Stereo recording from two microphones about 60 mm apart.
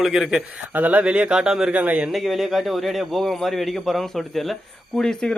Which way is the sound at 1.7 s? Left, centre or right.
Right.